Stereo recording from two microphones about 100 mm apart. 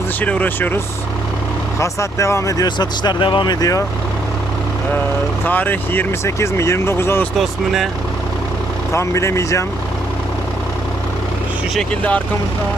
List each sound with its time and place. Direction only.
0.2 s speech: 15° left (ahead or behind)
1.8 s speech: 30° left (ahead or behind)
5.5 s speech: 20° left (ahead or behind)
7.3 s speech: centre (ahead or behind)
8.9 s speech: 30° left (ahead or behind)
11.9 s speech: 15° left (ahead or behind)